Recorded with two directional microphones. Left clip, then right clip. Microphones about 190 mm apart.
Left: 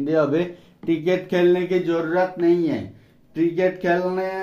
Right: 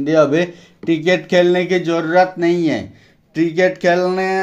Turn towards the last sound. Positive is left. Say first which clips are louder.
# right 6 dB
turn(degrees=-35)  # may be behind; listen again after turning